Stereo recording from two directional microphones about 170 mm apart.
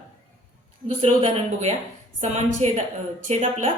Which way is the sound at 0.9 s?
35° right (ahead or behind).